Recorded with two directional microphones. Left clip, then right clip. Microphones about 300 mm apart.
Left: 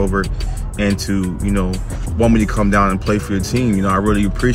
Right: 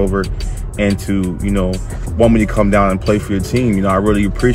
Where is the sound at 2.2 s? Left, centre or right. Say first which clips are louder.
Right 3 dB; right.